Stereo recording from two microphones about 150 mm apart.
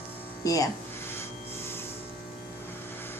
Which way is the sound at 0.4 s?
25° left (ahead or behind).